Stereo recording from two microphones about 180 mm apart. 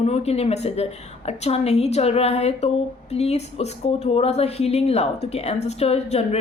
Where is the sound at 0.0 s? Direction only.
35° left (ahead or behind).